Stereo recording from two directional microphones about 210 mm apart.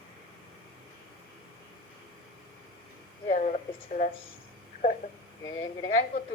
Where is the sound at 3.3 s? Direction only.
35° left (ahead or behind).